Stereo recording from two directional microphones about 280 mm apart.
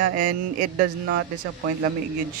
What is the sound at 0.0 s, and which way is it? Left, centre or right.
Speech, right.